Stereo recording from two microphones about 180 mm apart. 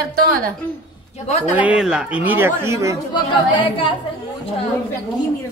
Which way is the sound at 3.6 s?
30° left (ahead or behind).